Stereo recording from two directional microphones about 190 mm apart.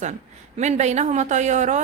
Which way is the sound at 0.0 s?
40° right (ahead or behind).